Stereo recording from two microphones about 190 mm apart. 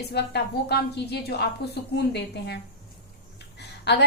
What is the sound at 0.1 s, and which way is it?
A woman's voice, 60° left (ahead or behind).